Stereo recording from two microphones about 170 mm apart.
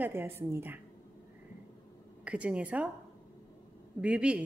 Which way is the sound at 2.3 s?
5° right (ahead or behind).